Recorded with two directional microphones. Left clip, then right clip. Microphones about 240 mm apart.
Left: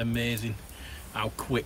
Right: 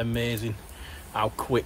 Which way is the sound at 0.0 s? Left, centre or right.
Centre.